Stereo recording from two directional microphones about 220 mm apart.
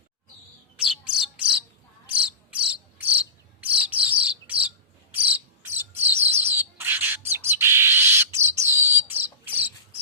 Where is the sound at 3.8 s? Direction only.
5° right (ahead or behind).